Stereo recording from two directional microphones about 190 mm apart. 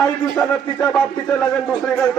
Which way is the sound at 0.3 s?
5° left (ahead or behind).